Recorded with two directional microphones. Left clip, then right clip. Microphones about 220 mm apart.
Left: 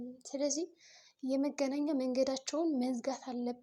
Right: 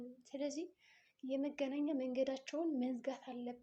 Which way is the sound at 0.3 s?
30° left (ahead or behind).